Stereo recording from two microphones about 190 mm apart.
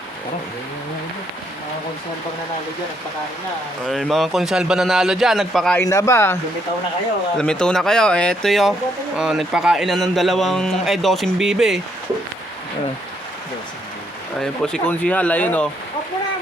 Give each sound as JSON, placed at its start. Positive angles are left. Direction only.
{"t": 3.8, "sound": "speech", "side_deg": 0}
{"t": 5.8, "sound": "speech", "side_deg": 15}
{"t": 7.3, "sound": "speech", "side_deg": 5}
{"t": 14.4, "sound": "speech", "side_deg": 5}